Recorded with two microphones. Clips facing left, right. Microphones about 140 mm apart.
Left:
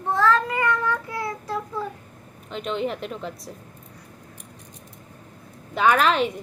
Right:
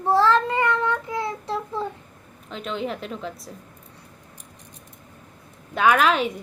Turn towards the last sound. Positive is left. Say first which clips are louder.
# even
turn(degrees=-5)  # may be behind; listen again after turning